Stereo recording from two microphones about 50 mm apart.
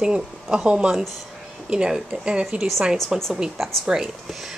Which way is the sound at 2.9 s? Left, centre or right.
Centre.